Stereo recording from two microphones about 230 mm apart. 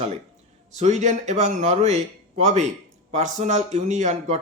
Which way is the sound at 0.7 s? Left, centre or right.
Right.